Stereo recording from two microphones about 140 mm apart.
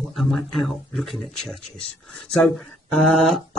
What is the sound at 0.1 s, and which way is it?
Speech, centre (ahead or behind).